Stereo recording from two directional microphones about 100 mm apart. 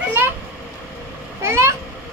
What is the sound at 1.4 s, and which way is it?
Speech, 25° right (ahead or behind).